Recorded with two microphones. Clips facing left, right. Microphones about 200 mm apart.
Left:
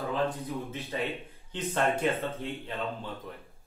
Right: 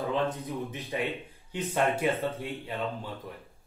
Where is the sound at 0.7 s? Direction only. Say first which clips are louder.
Right 1 dB; 15° right (ahead or behind).